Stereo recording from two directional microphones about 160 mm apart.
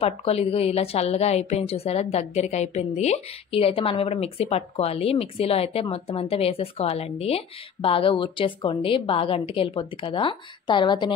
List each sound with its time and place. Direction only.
0.0 s a woman's voice: 40° left (ahead or behind)